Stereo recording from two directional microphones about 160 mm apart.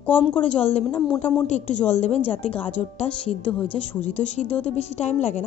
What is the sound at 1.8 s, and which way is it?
Speech, 45° left (ahead or behind).